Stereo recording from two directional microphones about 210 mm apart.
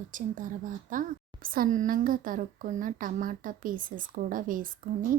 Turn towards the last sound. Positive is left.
turn(degrees=-40)  # may be behind; listen again after turning